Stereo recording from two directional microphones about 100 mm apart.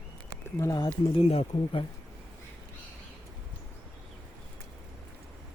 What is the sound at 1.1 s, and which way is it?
Speech, 80° left.